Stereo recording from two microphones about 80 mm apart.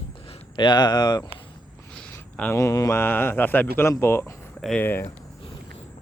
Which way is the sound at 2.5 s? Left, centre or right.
Left.